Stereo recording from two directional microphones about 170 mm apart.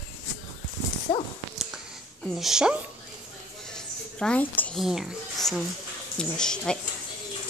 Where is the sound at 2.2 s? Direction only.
Centre (ahead or behind).